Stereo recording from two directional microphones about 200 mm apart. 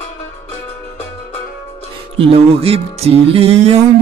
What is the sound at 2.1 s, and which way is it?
Music, 30° right (ahead or behind).